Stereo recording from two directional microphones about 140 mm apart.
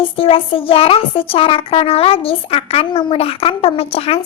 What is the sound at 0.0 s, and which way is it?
A woman's voice, 40° left (ahead or behind).